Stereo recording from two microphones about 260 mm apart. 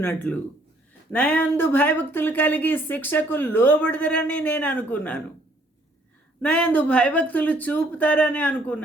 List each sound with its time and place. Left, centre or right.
0.0 s speech: centre
6.4 s speech: centre